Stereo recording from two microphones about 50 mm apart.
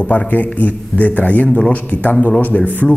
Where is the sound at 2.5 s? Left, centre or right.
Centre.